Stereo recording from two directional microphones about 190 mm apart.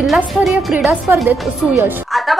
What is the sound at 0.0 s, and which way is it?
Speech, centre (ahead or behind).